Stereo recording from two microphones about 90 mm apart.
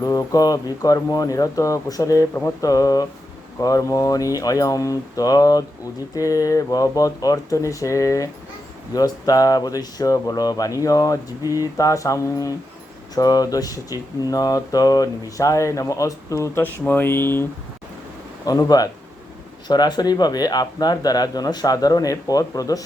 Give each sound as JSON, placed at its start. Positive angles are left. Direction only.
{"t": 0.0, "sound": "speech", "side_deg": 40}
{"t": 16.8, "sound": "speech", "side_deg": 25}
{"t": 18.4, "sound": "speech", "side_deg": 40}